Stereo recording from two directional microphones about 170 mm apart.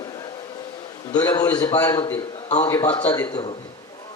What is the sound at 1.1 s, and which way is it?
A man's voice, 25° left (ahead or behind).